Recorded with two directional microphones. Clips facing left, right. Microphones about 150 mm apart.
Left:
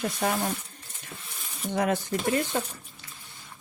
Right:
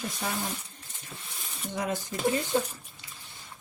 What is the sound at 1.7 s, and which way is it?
Speech, 70° left (ahead or behind).